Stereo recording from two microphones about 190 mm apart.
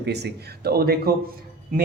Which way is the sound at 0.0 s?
60° right (ahead or behind).